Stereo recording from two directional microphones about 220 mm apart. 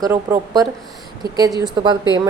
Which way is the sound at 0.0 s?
15° right (ahead or behind).